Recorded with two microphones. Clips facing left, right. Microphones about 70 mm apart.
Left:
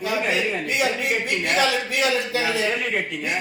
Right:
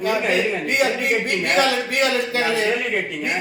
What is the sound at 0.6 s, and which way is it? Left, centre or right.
A man's voice, right.